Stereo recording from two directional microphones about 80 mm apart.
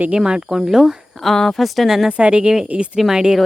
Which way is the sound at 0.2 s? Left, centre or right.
Centre.